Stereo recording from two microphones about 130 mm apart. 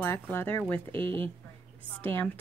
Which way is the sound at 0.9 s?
40° right (ahead or behind).